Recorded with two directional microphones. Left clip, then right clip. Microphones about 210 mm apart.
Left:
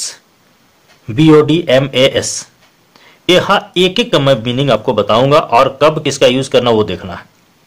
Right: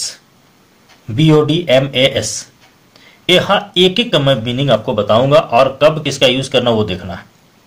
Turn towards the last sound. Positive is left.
turn(degrees=30)  # may be behind; listen again after turning